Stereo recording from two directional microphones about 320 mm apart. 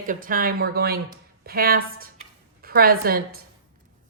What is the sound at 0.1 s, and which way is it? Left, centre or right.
A woman's voice, right.